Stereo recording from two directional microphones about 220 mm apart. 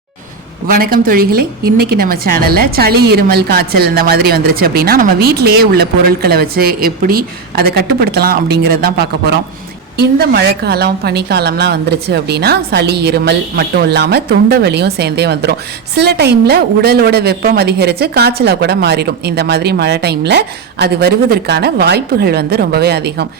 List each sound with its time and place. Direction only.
0.7 s a woman's voice: 40° right (ahead or behind)
10.0 s a woman's voice: 45° right (ahead or behind)